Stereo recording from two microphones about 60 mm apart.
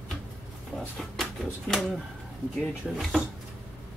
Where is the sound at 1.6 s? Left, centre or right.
Centre.